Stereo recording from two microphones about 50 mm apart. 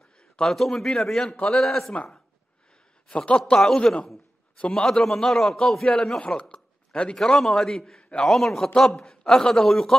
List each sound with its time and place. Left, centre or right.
0.2 s a man's voice: centre
3.1 s a man's voice: left
4.9 s a man's voice: centre
6.5 s a sound: centre
7.2 s a man's voice: centre
8.0 s a sound: left
8.3 s a man's voice: centre